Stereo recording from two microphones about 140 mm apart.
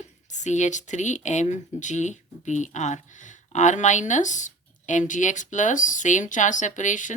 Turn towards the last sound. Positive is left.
turn(degrees=65)  # may be behind; listen again after turning